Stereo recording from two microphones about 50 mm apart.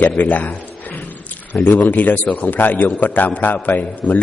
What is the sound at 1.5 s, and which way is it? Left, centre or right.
A man's voice, left.